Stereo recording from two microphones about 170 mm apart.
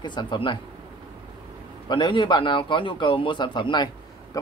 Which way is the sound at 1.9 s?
30° left (ahead or behind).